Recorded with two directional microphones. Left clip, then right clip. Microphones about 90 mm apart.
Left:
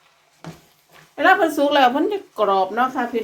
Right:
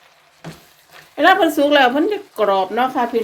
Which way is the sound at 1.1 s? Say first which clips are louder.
Right 3 dB; 45° right (ahead or behind).